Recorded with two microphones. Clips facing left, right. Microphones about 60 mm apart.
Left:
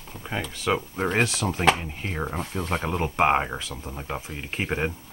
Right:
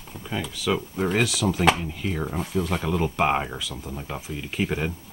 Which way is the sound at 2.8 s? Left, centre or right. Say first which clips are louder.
Left 3 dB; left.